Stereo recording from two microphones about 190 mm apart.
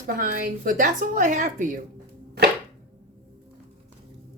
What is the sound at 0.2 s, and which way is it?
A woman's voice, 50° right (ahead or behind).